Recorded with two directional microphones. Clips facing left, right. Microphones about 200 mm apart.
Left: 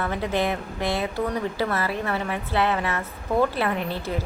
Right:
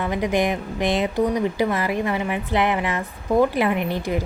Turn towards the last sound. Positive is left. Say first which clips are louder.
# right 4 dB
turn(degrees=-15)  # may be behind; listen again after turning